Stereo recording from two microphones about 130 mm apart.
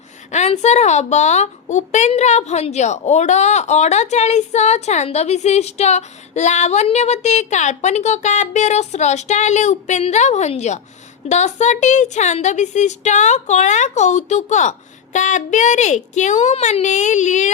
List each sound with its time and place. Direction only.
0.3 s a woman's voice: 60° left (ahead or behind)